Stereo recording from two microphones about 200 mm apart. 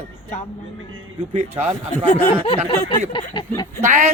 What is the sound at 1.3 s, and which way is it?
Speech, 35° right (ahead or behind).